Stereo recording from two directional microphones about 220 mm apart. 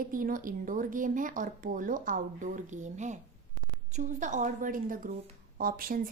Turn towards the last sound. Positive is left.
turn(degrees=-40)  # may be behind; listen again after turning